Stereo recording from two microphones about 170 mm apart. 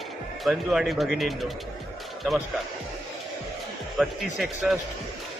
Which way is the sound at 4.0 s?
Centre (ahead or behind).